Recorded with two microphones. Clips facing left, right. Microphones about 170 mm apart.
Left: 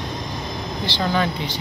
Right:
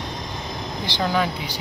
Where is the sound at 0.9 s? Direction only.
15° right (ahead or behind).